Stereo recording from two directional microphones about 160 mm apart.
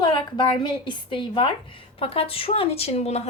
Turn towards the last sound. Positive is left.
turn(degrees=40)  # may be behind; listen again after turning